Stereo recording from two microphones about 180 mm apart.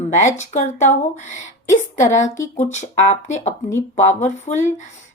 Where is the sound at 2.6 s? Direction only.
40° left (ahead or behind).